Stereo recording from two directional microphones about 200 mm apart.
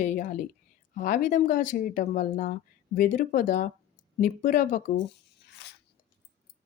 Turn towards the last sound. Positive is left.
turn(degrees=40)  # may be behind; listen again after turning